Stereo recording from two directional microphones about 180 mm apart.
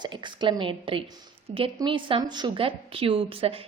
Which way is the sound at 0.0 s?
25° right (ahead or behind).